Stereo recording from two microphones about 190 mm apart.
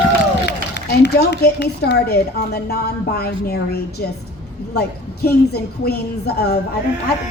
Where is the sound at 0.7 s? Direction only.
60° left (ahead or behind).